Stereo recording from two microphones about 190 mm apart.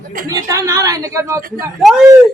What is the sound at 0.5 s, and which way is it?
Speech, 15° right (ahead or behind).